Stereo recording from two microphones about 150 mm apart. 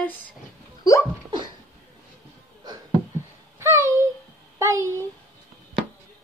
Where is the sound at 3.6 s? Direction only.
20° right (ahead or behind).